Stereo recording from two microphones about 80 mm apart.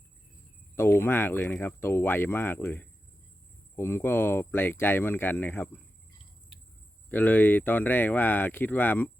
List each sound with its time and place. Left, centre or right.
0.8 s speech: left
7.1 s speech: left